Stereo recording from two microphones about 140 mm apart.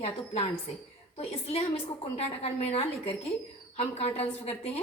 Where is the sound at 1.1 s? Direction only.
45° left (ahead or behind).